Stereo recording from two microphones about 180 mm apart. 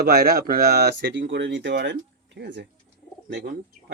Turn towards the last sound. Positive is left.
turn(degrees=-60)  # may be behind; listen again after turning